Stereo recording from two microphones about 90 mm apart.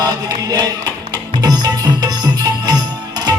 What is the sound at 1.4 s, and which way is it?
Music, 50° right (ahead or behind).